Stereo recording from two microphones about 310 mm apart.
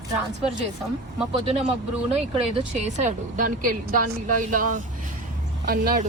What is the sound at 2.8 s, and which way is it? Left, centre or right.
A woman's voice, right.